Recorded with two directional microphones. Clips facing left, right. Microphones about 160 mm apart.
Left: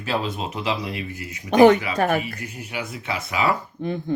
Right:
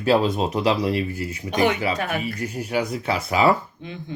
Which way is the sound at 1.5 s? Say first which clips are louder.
Left 7 dB; 45° left (ahead or behind).